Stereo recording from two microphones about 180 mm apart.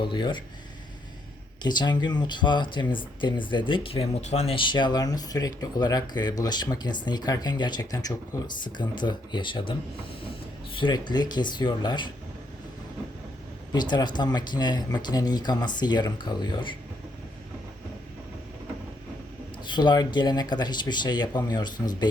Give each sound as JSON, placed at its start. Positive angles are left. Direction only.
{"t": 0.0, "sound": "speech", "side_deg": 25}
{"t": 1.6, "sound": "speech", "side_deg": 25}
{"t": 10.8, "sound": "speech", "side_deg": 25}
{"t": 13.7, "sound": "speech", "side_deg": 25}
{"t": 19.6, "sound": "speech", "side_deg": 25}